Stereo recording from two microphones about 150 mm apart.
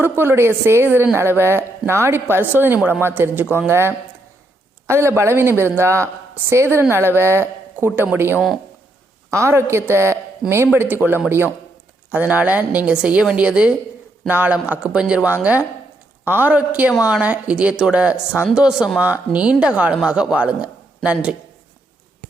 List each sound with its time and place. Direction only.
0.0 s speech: 15° right (ahead or behind)